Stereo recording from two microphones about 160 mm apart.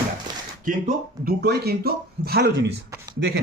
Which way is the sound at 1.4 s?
85° right.